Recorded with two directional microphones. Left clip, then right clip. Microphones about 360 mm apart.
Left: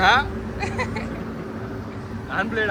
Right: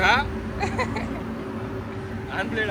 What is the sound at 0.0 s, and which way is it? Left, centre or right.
Vehicle, left.